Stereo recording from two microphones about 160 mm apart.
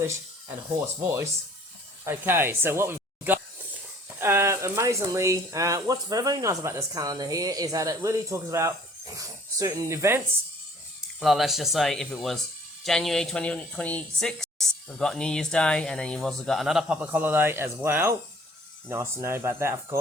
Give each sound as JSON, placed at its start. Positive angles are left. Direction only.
{"t": 2.0, "sound": "speech", "side_deg": -15}
{"t": 11.2, "sound": "speech", "side_deg": 0}